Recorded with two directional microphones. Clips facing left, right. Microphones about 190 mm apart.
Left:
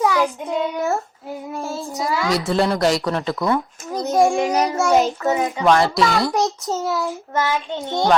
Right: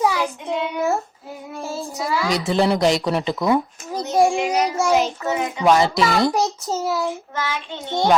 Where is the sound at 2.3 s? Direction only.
Centre (ahead or behind).